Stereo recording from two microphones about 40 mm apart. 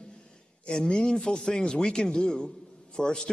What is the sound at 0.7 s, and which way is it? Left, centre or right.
Speech, centre.